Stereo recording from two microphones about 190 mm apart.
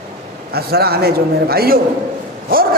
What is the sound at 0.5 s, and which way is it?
A man's voice, 55° right (ahead or behind).